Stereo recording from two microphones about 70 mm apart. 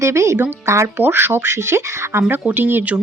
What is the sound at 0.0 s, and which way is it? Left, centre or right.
Speech, right.